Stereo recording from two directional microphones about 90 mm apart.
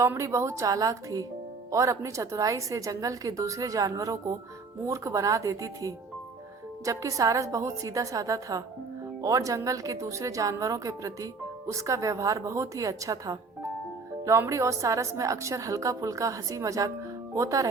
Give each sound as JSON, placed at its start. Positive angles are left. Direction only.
{"t": 0.0, "sound": "a woman's voice", "side_deg": -35}